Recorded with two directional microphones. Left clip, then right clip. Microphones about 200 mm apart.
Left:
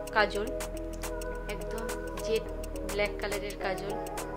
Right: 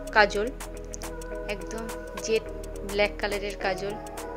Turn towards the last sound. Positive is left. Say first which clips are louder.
# right 4 dB
turn(degrees=-25)  # may be behind; listen again after turning